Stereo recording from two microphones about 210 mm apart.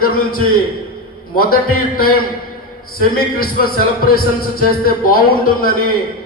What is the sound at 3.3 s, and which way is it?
Speech, 45° left (ahead or behind).